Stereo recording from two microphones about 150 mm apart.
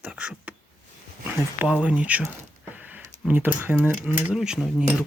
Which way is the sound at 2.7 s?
10° right (ahead or behind).